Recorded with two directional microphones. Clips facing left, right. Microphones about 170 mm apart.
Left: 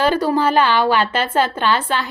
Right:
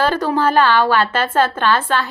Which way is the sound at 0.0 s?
10° left (ahead or behind).